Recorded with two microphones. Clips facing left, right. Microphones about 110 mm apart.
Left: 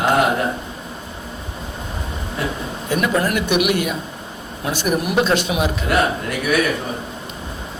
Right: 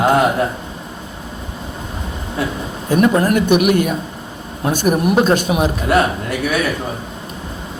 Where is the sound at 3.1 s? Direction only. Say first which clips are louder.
Right 5 dB; 35° right (ahead or behind).